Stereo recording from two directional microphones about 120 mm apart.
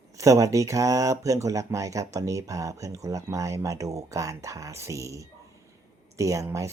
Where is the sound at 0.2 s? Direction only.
25° right (ahead or behind).